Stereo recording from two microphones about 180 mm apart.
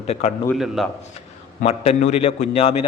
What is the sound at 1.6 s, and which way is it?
A man's voice, 40° left (ahead or behind).